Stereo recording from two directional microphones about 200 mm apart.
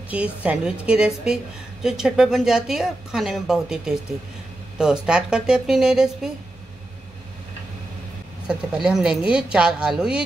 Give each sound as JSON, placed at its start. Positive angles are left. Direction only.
{"t": 0.1, "sound": "a woman's voice", "side_deg": -5}
{"t": 8.5, "sound": "a woman's voice", "side_deg": -5}